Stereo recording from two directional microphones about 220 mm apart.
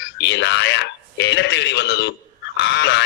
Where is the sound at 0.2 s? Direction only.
50° left (ahead or behind).